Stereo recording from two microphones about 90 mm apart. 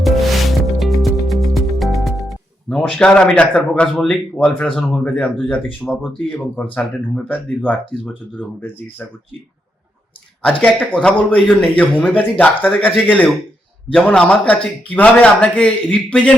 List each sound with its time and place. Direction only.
0.0 s music: centre (ahead or behind)
3.9 s speech: 5° left (ahead or behind); by 9.0 s 20° left (ahead or behind)
10.4 s speech: 15° left (ahead or behind)